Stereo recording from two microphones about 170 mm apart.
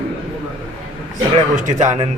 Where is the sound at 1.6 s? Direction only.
45° right (ahead or behind).